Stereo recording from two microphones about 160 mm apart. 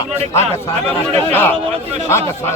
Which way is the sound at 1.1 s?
15° left (ahead or behind).